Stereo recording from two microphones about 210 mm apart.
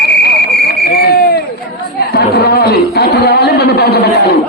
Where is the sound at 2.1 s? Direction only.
45° left (ahead or behind).